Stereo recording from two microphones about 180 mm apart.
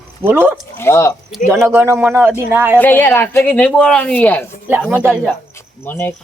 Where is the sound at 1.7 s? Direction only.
15° right (ahead or behind).